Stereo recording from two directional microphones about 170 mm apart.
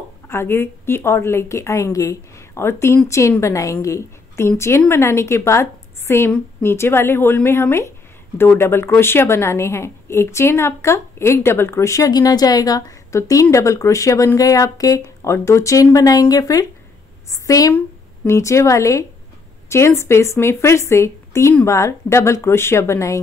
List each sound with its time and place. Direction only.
0.3 s a woman's voice: 15° left (ahead or behind)